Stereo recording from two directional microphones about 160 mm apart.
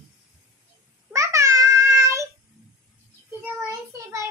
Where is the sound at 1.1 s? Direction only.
20° right (ahead or behind).